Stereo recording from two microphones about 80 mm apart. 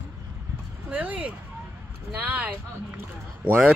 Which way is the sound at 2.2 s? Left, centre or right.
Centre.